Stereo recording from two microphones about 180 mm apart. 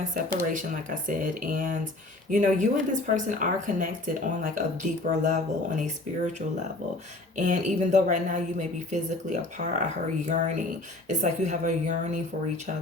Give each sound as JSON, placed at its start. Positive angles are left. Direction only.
{"t": 0.0, "sound": "speech", "side_deg": -45}
{"t": 7.3, "sound": "speech", "side_deg": -45}